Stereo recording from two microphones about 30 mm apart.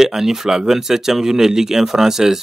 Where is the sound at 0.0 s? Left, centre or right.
Centre.